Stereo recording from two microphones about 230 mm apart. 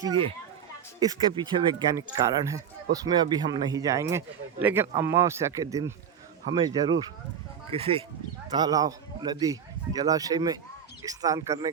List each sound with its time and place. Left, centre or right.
0.1 s speech: right